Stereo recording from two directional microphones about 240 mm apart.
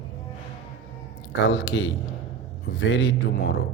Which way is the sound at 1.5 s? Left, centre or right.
Left.